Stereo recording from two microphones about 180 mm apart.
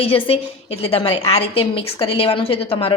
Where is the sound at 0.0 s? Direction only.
30° left (ahead or behind).